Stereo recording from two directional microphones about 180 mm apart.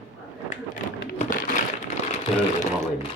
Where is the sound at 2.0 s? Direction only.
35° left (ahead or behind).